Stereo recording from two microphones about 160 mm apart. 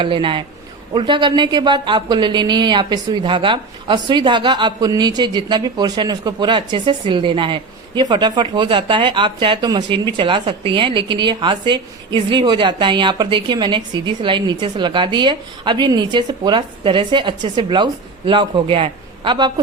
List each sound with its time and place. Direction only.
0.0 s a man's voice: 30° right (ahead or behind)